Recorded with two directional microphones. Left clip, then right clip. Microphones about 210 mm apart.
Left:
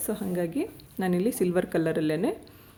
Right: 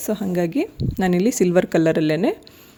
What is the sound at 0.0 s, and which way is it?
Speech, 40° right (ahead or behind).